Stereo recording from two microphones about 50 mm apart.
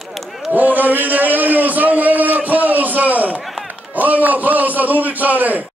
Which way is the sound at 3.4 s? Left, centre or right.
Centre.